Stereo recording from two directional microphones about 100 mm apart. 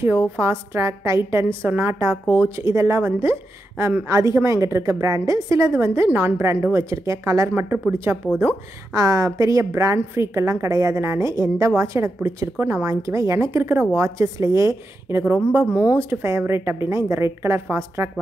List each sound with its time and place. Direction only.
0.4 s a woman's voice: 30° right (ahead or behind)
7.4 s a woman's voice: 20° right (ahead or behind)
8.9 s a woman's voice: 35° right (ahead or behind)
15.7 s speech: 20° left (ahead or behind)
16.0 s a woman's voice: 30° right (ahead or behind)